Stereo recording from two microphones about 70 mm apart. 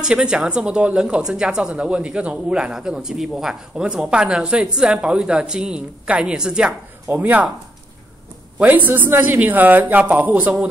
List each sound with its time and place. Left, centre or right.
0.0 s speech: centre
7.1 s speech: right
8.5 s speech: right